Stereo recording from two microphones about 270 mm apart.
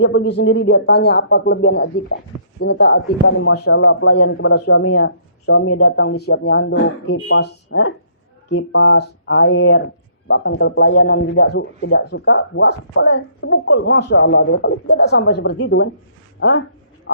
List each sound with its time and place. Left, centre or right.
0.0 s a man's voice: left
3.2 s a man's voice: left